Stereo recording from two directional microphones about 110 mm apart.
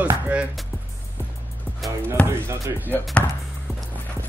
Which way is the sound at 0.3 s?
10° right (ahead or behind).